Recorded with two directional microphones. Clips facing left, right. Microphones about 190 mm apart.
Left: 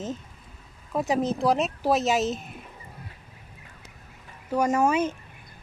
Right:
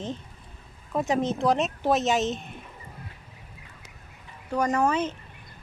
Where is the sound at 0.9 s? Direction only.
Centre (ahead or behind).